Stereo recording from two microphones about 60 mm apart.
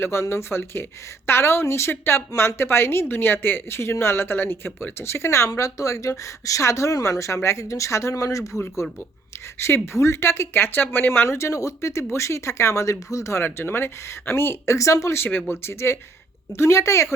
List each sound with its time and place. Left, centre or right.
0.0 s speech: left
5.5 s a woman's voice: left
8.8 s speech: left
9.6 s speech: left
11.3 s a woman's voice: left
13.4 s speech: left
14.8 s a woman's voice: left
15.3 s speech: left
15.6 s a woman's voice: left